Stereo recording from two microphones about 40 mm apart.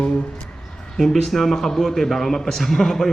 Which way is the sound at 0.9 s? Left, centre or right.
Centre.